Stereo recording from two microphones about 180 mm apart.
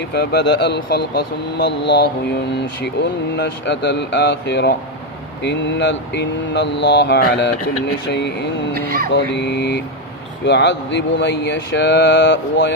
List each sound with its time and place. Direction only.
0.1 s speech: 65° left (ahead or behind)
3.3 s speech: 70° left (ahead or behind)
8.7 s speech: 55° right (ahead or behind)
9.1 s speech: 70° left (ahead or behind)